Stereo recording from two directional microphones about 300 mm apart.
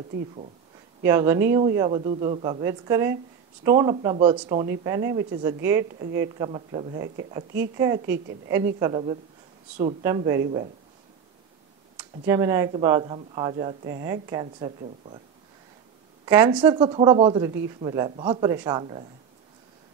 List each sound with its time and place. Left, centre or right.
1.0 s speech: centre
12.0 s speech: centre
16.3 s speech: centre